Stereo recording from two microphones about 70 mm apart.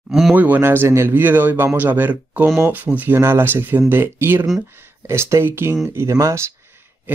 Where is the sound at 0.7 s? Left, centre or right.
Right.